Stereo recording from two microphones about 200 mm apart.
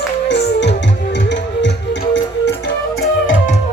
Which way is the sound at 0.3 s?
60° left (ahead or behind).